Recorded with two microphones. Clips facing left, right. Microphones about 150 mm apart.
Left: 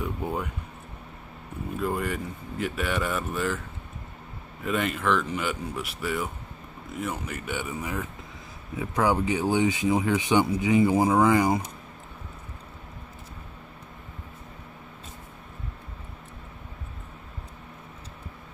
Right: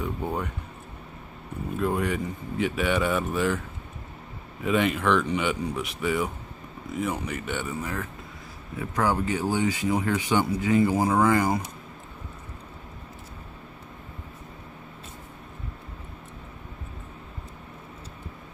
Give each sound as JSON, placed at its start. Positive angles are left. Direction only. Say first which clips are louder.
{"t": 0.0, "sound": "speech", "louder": "right 1 dB", "side_deg": 5}
{"t": 1.8, "sound": "speech", "louder": "right 3 dB", "side_deg": 0}
{"t": 4.6, "sound": "speech", "louder": "right 3 dB", "side_deg": 0}